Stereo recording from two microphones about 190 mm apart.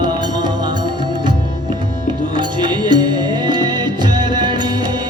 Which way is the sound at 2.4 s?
25° right (ahead or behind).